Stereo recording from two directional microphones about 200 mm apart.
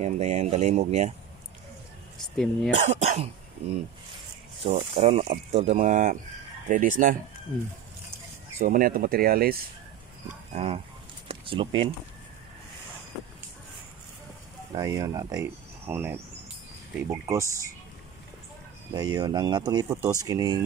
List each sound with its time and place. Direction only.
0.0 s speech: 35° right (ahead or behind)
2.3 s speech: 5° left (ahead or behind)
2.9 s speech: 30° right (ahead or behind)
4.7 s speech: 35° right (ahead or behind)
8.5 s speech: 45° right (ahead or behind)
10.2 s speech: 30° right (ahead or behind)
14.8 s speech: 15° right (ahead or behind)
18.9 s speech: 20° right (ahead or behind)